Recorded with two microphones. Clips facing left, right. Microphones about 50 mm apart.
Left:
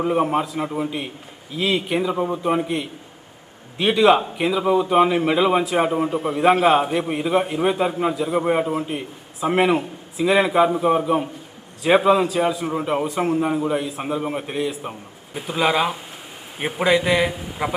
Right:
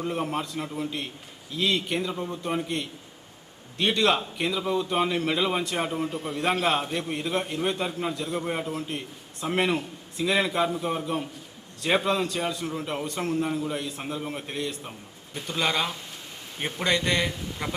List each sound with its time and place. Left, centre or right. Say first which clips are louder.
0.0 s a man's voice: left 9 dB; centre
8.8 s a man's voice: left 6 dB; centre
14.0 s a man's voice: left 8 dB; centre